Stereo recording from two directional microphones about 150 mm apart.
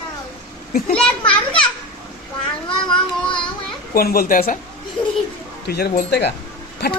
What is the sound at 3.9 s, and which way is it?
Speech, 80° left.